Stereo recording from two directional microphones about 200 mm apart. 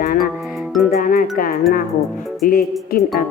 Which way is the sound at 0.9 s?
45° left (ahead or behind).